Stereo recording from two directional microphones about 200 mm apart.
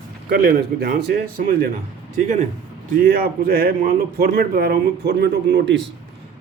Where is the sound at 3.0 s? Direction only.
50° right (ahead or behind).